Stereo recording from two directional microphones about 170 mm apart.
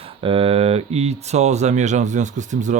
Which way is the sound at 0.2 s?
30° right (ahead or behind).